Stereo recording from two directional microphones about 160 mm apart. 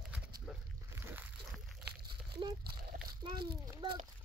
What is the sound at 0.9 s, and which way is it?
Boat, 15° right (ahead or behind).